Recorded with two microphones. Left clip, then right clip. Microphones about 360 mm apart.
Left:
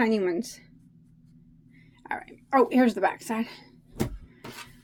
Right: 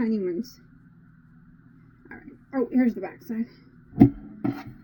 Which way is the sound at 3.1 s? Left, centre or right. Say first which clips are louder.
Left 5 dB; centre.